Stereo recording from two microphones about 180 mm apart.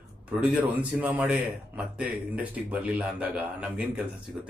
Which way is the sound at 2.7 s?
5° right (ahead or behind).